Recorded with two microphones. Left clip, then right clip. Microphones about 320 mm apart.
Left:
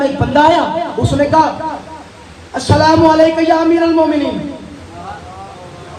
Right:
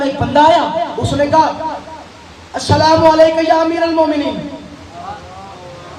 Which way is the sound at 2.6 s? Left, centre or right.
Right.